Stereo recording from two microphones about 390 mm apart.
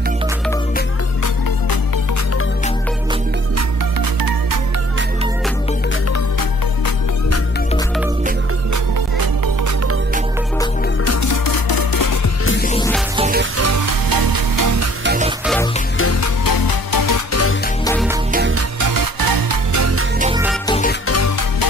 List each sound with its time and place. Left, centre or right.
4.2 s music: right
11.1 s music: left
12.6 s music: centre
13.1 s music: centre
13.4 s music: right
15.0 s music: centre
15.4 s music: centre
16.0 s music: left
16.4 s music: left
18.3 s music: right
18.8 s music: right
20.2 s music: centre
20.6 s music: centre
21.1 s music: left